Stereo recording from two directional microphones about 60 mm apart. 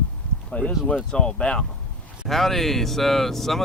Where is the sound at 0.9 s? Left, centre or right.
Centre.